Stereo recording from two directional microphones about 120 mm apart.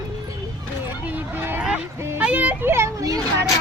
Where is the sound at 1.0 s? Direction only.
15° right (ahead or behind).